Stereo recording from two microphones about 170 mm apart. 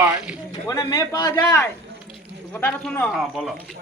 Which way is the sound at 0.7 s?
20° left (ahead or behind).